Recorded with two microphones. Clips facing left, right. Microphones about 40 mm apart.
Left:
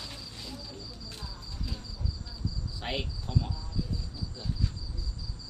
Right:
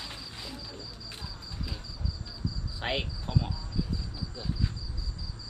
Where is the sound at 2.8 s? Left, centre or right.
Right.